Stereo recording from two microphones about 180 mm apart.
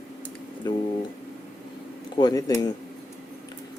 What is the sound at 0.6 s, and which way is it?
Speech, 25° left (ahead or behind).